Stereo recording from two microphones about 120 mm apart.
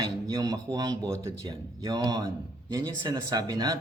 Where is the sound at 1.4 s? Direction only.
35° right (ahead or behind).